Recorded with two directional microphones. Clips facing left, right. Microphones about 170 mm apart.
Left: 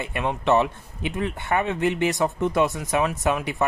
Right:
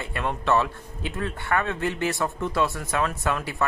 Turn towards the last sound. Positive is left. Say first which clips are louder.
# left 3 dB
turn(degrees=15)  # may be behind; listen again after turning